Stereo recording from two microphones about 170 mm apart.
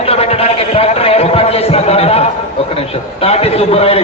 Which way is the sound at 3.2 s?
35° left (ahead or behind).